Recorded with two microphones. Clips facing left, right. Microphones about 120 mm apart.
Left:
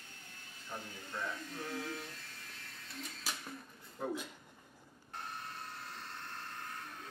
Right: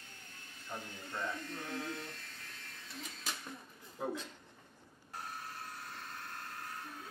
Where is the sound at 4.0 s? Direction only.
5° right (ahead or behind).